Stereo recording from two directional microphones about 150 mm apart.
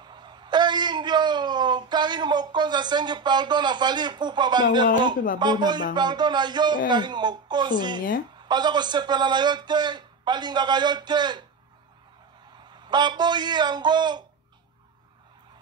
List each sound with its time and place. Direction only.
0.0 s a sound: 30° right (ahead or behind)
5.4 s a man's voice: 30° right (ahead or behind)
12.7 s a man's voice: 30° right (ahead or behind)